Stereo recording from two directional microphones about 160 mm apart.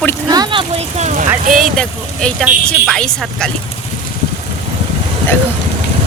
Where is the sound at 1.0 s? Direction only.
45° right (ahead or behind).